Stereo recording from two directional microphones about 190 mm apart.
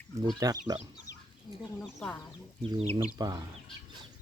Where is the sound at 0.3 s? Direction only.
20° right (ahead or behind).